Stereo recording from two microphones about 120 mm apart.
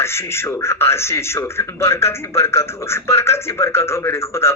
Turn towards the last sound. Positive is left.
turn(degrees=20)  # may be behind; listen again after turning